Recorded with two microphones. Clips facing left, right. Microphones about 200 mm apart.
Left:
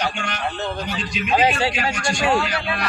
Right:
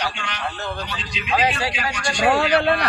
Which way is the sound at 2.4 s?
55° right (ahead or behind).